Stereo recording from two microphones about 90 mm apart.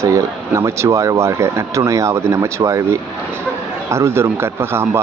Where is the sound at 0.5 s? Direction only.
35° right (ahead or behind).